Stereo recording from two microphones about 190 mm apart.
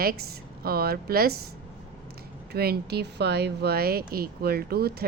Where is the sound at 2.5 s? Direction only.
55° right (ahead or behind).